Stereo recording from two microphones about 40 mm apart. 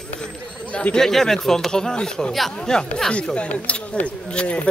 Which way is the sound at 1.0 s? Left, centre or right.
Centre.